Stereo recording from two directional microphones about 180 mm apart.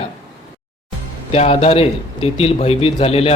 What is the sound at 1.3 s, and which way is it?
A man's voice, 35° left (ahead or behind).